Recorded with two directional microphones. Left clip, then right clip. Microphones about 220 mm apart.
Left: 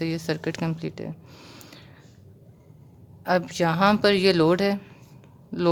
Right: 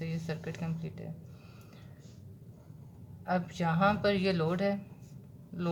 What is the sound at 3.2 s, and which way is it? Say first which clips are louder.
A woman's voice: left 10 dB; 50° left (ahead or behind).